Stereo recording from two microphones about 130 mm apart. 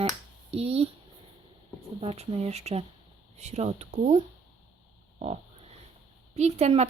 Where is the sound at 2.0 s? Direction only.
50° right (ahead or behind).